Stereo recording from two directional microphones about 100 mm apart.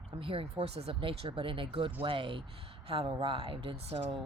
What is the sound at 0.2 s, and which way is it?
Speech, 65° right (ahead or behind).